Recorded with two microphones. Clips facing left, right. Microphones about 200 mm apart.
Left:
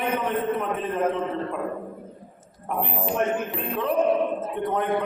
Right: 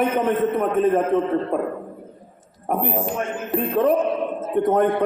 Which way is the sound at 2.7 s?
45° right (ahead or behind).